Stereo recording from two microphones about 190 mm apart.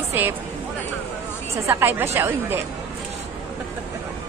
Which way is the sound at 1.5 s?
10° right (ahead or behind).